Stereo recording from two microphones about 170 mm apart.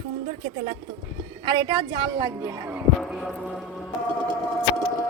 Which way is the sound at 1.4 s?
25° right (ahead or behind).